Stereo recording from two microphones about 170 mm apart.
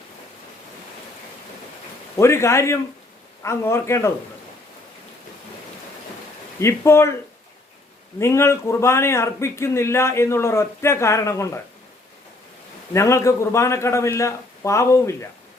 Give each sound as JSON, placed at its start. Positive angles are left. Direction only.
{"t": 2.1, "sound": "speech", "side_deg": 15}
{"t": 6.6, "sound": "speech", "side_deg": 15}
{"t": 8.2, "sound": "speech", "side_deg": 15}
{"t": 12.9, "sound": "speech", "side_deg": 15}